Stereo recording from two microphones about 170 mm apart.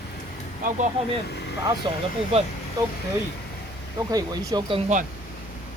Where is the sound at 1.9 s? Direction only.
30° right (ahead or behind).